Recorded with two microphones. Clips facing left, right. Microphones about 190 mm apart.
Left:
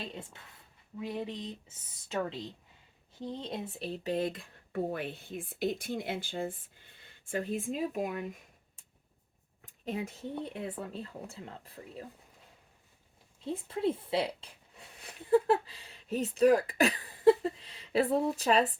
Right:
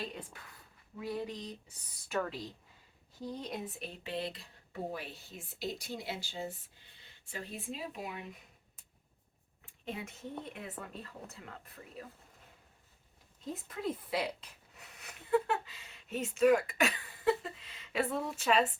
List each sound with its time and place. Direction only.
0.1 s speech: 25° left (ahead or behind); by 8.4 s 50° left (ahead or behind)
9.6 s a sound: 40° left (ahead or behind)
10.4 s speech: 30° left (ahead or behind)
13.4 s speech: 30° left (ahead or behind)